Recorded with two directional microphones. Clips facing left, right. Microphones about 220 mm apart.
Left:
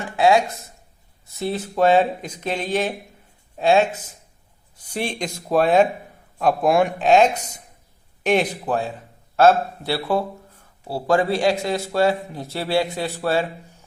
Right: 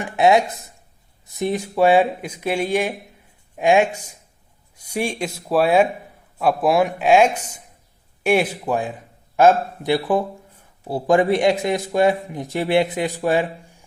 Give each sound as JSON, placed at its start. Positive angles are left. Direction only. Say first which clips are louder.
{"t": 0.0, "sound": "a man's voice", "louder": "right 1 dB", "side_deg": -20}